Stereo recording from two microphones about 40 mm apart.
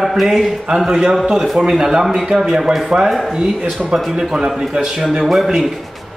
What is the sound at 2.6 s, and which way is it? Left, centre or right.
A man's voice, centre.